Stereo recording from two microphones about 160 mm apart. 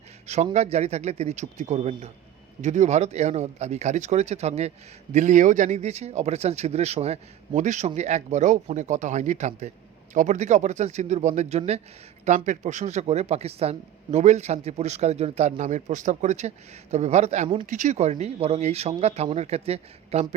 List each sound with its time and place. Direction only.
0.5 s speech: 45° right (ahead or behind)